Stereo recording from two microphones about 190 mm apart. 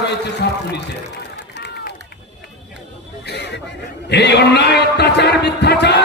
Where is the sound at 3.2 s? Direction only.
60° left (ahead or behind).